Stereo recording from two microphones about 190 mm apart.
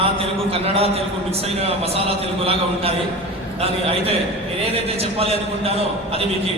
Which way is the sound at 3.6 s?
30° right (ahead or behind).